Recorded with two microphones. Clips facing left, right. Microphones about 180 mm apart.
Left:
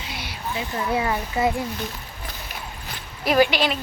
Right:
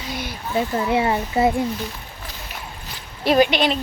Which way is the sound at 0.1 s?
45° right (ahead or behind).